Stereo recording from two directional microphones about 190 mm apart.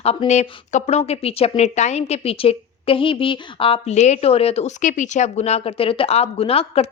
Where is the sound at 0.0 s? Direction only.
30° left (ahead or behind).